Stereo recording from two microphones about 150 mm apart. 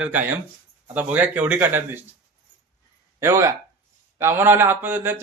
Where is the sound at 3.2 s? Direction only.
20° right (ahead or behind).